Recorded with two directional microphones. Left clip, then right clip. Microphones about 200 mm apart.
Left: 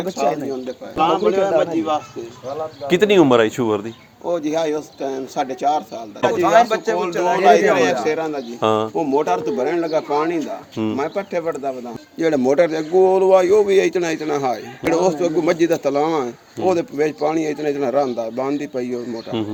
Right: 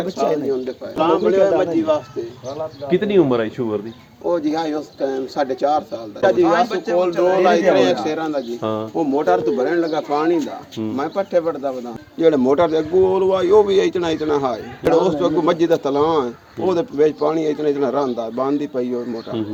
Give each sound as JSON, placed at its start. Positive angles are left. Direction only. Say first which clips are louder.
{"t": 0.9, "sound": "a man's voice", "louder": "right 1 dB", "side_deg": 25}
{"t": 2.8, "sound": "speech", "louder": "left 3 dB", "side_deg": 55}
{"t": 4.5, "sound": "a man's voice", "louder": "left 2 dB", "side_deg": 30}
{"t": 8.6, "sound": "speech", "louder": "left 10 dB", "side_deg": 55}
{"t": 9.0, "sound": "a man's voice", "louder": "right 1 dB", "side_deg": 30}
{"t": 12.2, "sound": "a man's voice", "louder": "right 1 dB", "side_deg": 45}